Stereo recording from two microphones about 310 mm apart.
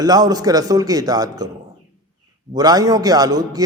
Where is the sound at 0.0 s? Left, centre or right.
Centre.